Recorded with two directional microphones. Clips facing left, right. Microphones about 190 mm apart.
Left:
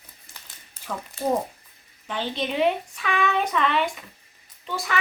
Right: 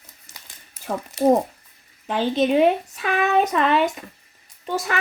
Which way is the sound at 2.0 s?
45° right (ahead or behind).